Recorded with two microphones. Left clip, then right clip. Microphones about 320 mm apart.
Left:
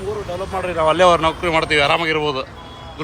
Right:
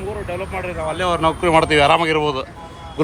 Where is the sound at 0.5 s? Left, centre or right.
Left.